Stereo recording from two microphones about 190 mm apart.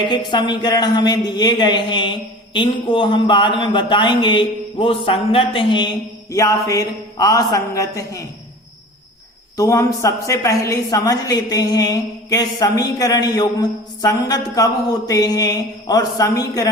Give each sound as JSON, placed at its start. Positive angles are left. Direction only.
{"t": 0.0, "sound": "speech", "side_deg": 25}
{"t": 9.6, "sound": "speech", "side_deg": 15}